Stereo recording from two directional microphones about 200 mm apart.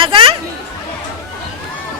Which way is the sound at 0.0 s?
25° right (ahead or behind).